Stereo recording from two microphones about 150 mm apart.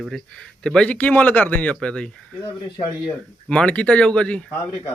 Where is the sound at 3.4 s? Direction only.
5° left (ahead or behind).